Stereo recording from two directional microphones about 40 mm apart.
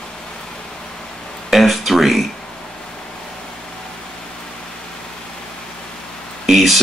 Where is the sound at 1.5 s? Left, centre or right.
Centre.